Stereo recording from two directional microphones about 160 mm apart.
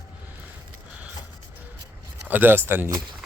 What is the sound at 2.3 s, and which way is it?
Speech, 10° right (ahead or behind).